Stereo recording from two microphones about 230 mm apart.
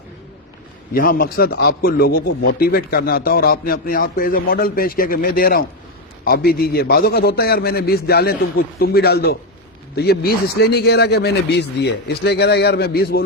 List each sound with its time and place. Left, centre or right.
0.9 s a man's voice: left